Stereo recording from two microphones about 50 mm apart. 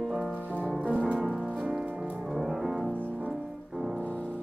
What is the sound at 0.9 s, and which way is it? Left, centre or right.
Music, right.